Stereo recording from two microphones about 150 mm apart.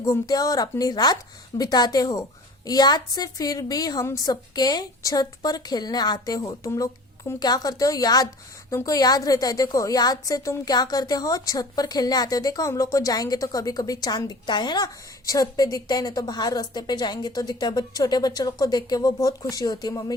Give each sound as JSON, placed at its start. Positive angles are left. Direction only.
{"t": 0.0, "sound": "a woman's voice", "side_deg": 25}